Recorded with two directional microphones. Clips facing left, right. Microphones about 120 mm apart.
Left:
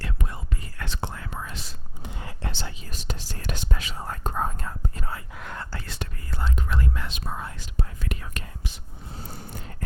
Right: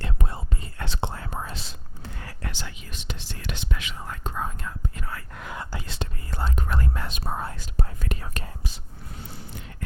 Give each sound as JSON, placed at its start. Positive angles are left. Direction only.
{"t": 0.0, "sound": "whispering", "side_deg": -30}
{"t": 2.0, "sound": "whispering", "side_deg": 20}
{"t": 5.3, "sound": "whispering", "side_deg": 0}
{"t": 5.5, "sound": "whispering", "side_deg": -15}
{"t": 6.3, "sound": "whispering", "side_deg": -45}
{"t": 9.0, "sound": "a sound", "side_deg": 40}